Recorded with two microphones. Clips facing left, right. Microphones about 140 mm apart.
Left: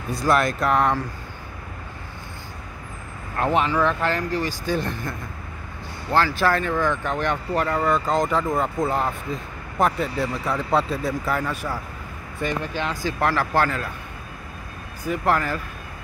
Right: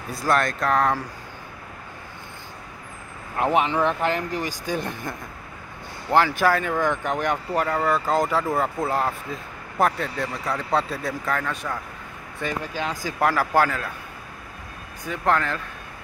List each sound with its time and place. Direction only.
0.1 s speech: centre (ahead or behind)
3.3 s speech: 15° right (ahead or behind); by 11.8 s 5° left (ahead or behind)
12.4 s speech: 5° right (ahead or behind)
15.0 s speech: 5° left (ahead or behind)